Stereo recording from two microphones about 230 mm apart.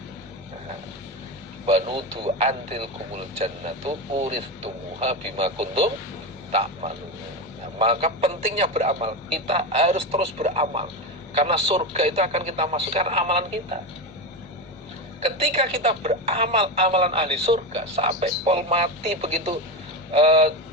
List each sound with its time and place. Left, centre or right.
1.6 s a woman's voice: right
15.2 s a woman's voice: right